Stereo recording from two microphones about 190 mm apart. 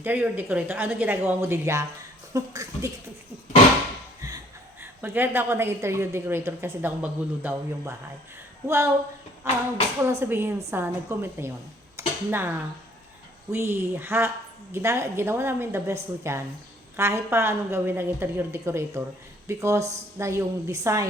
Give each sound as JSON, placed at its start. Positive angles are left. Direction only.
{"t": 0.0, "sound": "a woman's voice", "side_deg": -10}
{"t": 4.8, "sound": "a woman's voice", "side_deg": -10}
{"t": 11.9, "sound": "dishes", "side_deg": -10}
{"t": 13.5, "sound": "a woman's voice", "side_deg": -10}